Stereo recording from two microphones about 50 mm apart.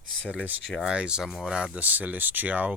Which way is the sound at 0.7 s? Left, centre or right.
Centre.